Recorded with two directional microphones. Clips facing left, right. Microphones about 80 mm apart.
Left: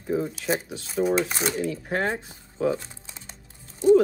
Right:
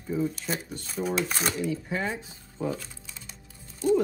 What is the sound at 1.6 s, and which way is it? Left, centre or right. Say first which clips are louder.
Speech: left 3 dB; left.